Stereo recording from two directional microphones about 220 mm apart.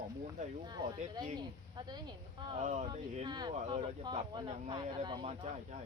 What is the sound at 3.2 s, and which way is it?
Speech, 20° right (ahead or behind).